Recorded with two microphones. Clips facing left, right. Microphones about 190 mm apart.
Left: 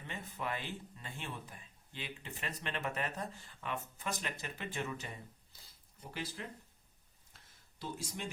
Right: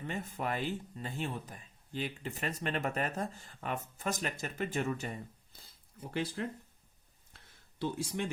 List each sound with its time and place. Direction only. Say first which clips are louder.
0.1 s speech: right 4 dB; 45° right (ahead or behind)
6.4 s speech: right 9 dB; 55° right (ahead or behind)
7.8 s speech: right 8 dB; 60° right (ahead or behind)